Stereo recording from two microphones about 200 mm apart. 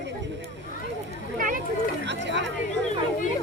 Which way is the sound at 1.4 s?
45° right (ahead or behind).